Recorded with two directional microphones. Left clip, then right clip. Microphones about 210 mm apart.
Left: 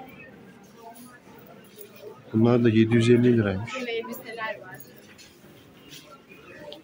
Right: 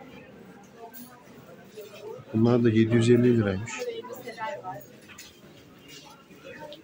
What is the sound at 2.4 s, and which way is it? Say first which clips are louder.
A man's voice: left 2 dB; 15° left (ahead or behind).